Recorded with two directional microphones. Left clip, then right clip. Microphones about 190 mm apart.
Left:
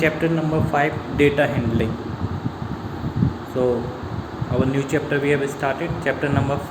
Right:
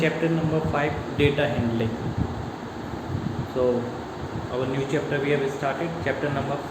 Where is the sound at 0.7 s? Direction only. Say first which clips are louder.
Left 5 dB; 50° left (ahead or behind).